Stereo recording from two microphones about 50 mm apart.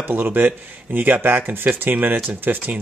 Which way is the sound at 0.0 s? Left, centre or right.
Right.